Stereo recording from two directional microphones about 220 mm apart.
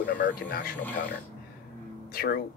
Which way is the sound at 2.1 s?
45° left (ahead or behind).